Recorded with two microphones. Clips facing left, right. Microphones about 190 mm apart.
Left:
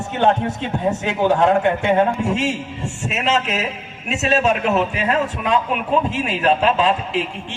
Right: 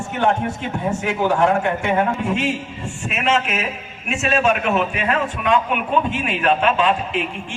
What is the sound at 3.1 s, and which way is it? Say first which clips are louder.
A man's voice: even; 40° left (ahead or behind).